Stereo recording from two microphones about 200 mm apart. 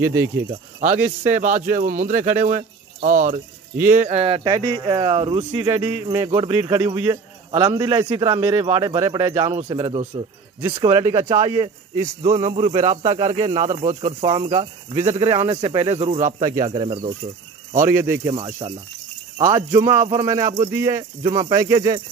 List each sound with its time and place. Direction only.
0.0 s speech: 10° right (ahead or behind)
0.5 s speech: 35° right (ahead or behind)
0.9 s speech: 10° right (ahead or behind)
1.3 s speech: 40° right (ahead or behind)
17.8 s speech: 10° right (ahead or behind)
18.3 s speech: 25° right (ahead or behind)
19.4 s speech: 15° right (ahead or behind)